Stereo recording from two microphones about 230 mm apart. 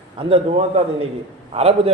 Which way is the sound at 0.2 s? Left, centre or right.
Right.